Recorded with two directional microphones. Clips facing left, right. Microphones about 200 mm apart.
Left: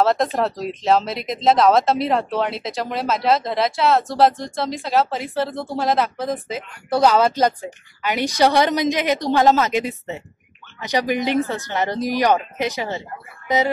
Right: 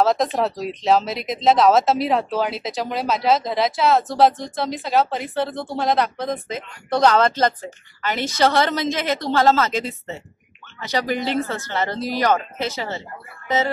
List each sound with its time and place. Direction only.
0.0 s speech: centre (ahead or behind); by 13.0 s 15° left (ahead or behind)